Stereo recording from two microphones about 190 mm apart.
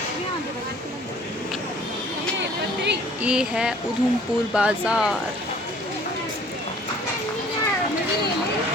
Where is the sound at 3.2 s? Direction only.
5° right (ahead or behind).